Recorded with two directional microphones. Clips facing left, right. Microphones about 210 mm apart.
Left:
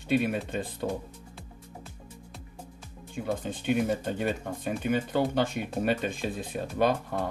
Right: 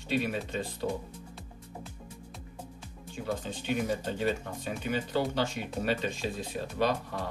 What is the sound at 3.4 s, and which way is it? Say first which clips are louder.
Speech: left 7 dB; 55° left (ahead or behind).